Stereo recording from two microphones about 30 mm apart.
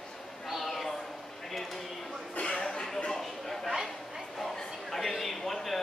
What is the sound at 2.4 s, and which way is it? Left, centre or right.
Chuckle, left.